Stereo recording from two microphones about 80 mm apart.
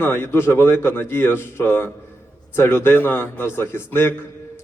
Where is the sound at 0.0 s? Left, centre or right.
Left.